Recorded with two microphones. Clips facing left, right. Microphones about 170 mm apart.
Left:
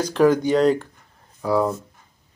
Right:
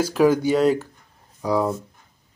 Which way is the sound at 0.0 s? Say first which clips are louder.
Even; 5° right (ahead or behind).